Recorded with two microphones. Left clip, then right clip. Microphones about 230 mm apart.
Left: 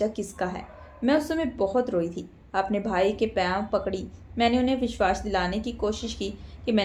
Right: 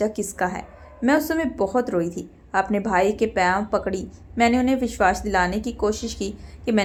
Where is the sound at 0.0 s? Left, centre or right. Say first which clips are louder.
Right 4 dB; right.